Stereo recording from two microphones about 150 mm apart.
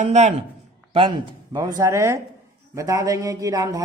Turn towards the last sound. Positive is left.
turn(degrees=-25)  # may be behind; listen again after turning